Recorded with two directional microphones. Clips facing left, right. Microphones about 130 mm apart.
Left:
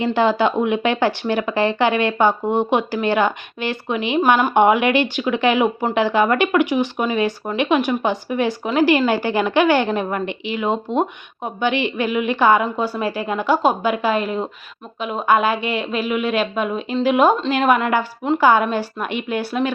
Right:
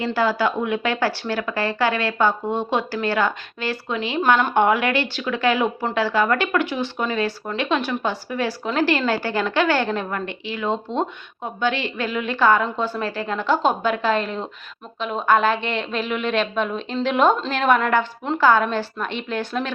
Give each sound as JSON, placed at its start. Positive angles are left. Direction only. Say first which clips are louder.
{"t": 0.0, "sound": "speech", "louder": "left 4 dB", "side_deg": 20}